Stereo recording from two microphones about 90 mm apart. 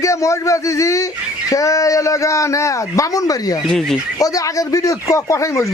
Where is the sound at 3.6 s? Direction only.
5° left (ahead or behind).